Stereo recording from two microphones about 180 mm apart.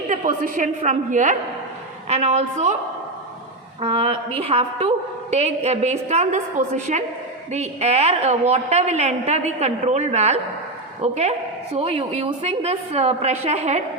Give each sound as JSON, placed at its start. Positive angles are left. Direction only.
{"t": 0.1, "sound": "a woman's voice", "side_deg": -50}
{"t": 3.8, "sound": "a woman's voice", "side_deg": -30}